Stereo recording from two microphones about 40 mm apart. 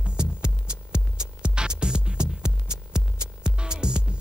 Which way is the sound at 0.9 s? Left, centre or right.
Right.